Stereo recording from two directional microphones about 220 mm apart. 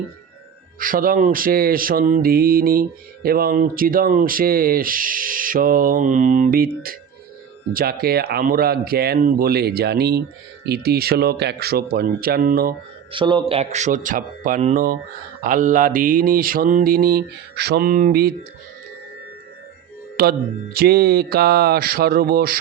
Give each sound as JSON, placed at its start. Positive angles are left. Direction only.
{"t": 0.8, "sound": "speech", "side_deg": -40}
{"t": 7.7, "sound": "speech", "side_deg": -40}
{"t": 13.1, "sound": "a man's voice", "side_deg": -20}
{"t": 20.2, "sound": "speech", "side_deg": -45}